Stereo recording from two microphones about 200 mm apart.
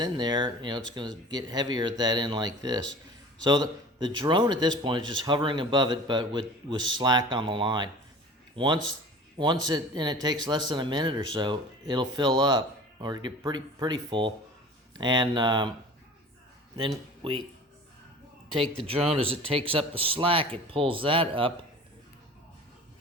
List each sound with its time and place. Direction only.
0.0 s speech: 20° right (ahead or behind)
2.8 s a sound: 65° right (ahead or behind)
3.4 s speech: 20° right (ahead or behind)
17.2 s speech: 30° right (ahead or behind)
18.9 s speech: 30° right (ahead or behind)